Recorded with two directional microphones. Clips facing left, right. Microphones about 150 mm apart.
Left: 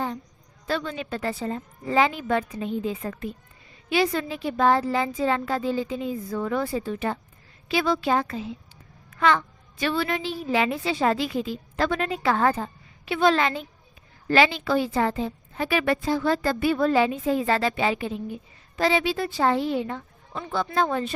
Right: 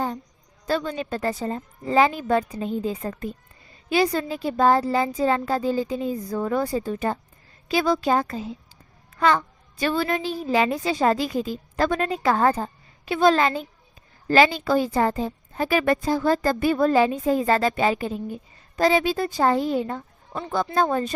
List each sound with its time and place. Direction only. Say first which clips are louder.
0.7 s a child's voice: right 3 dB; 40° right (ahead or behind)